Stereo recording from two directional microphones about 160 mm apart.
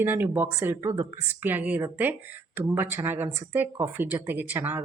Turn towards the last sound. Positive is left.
turn(degrees=-10)  # may be behind; listen again after turning